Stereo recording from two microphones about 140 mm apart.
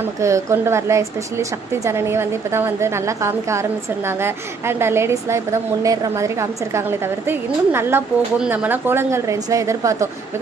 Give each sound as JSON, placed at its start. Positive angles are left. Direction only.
{"t": 0.2, "sound": "a woman's voice", "side_deg": -20}